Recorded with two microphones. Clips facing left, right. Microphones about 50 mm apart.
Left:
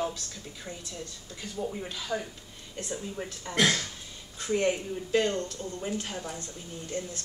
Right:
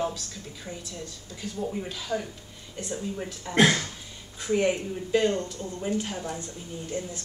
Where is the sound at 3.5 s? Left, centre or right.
Right.